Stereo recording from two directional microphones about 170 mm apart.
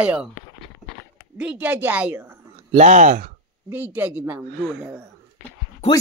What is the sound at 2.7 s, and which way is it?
Speech, 45° right (ahead or behind).